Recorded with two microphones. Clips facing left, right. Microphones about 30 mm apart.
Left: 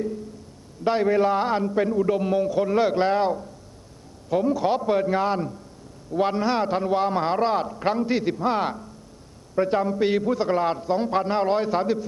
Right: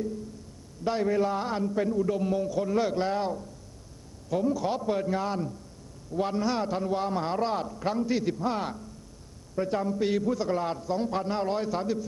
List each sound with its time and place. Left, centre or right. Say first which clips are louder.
0.9 s a man's voice: left 6 dB; left